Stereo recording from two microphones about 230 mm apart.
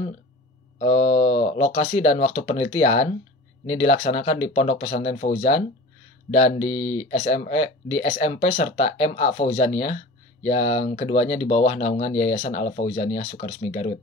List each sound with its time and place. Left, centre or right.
0.7 s speech: left